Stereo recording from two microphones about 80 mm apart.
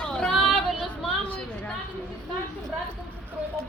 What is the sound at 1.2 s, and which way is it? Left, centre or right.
Speech, centre.